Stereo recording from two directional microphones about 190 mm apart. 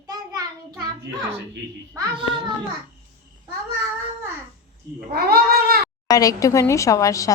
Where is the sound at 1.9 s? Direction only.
25° right (ahead or behind).